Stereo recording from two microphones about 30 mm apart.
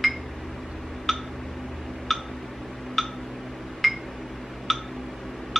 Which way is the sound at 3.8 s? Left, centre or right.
Centre.